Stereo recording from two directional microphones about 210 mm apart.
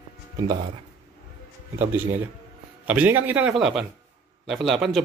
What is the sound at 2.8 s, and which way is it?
A man's voice, 10° right (ahead or behind).